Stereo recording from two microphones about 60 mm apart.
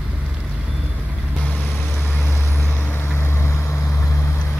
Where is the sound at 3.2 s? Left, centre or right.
Left.